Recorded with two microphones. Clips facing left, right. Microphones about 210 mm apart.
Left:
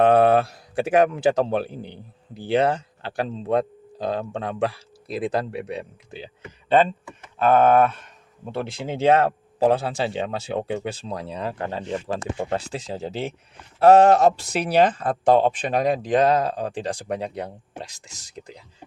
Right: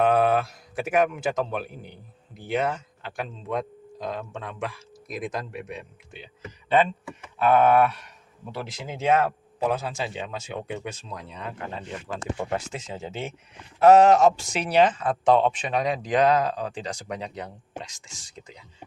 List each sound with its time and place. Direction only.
0.0 s speech: 30° left (ahead or behind)
7.4 s speech: 45° left (ahead or behind)
8.5 s speech: 30° left (ahead or behind)
17.2 s speech: 55° left (ahead or behind)
17.9 s speech: 40° left (ahead or behind)